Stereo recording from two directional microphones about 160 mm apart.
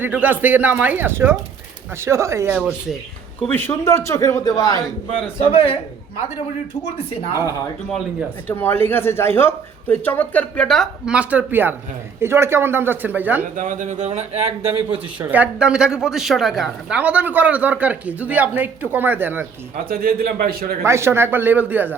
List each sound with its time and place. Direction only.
0.0 s speech: 10° right (ahead or behind)
3.5 s speech: 15° left (ahead or behind)
5.5 s speech: 35° left (ahead or behind)
8.4 s speech: 15° left (ahead or behind); by 13.4 s 10° right (ahead or behind)
13.6 s speech: 50° right (ahead or behind)
14.9 s speech: 10° right (ahead or behind)
19.7 s a man's voice: 65° right (ahead or behind)
20.8 s speech: 15° right (ahead or behind)